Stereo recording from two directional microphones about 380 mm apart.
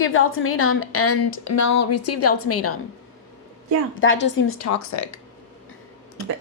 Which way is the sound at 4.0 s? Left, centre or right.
Left.